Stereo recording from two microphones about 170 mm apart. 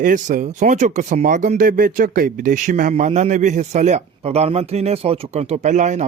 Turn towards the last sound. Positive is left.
turn(degrees=-45)  # may be behind; listen again after turning